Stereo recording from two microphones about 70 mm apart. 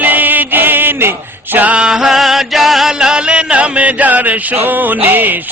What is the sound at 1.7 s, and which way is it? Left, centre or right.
Music, centre.